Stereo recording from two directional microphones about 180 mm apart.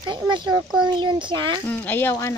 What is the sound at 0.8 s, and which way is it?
Speech, 25° right (ahead or behind).